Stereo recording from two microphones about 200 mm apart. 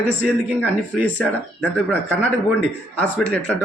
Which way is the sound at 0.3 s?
5° left (ahead or behind).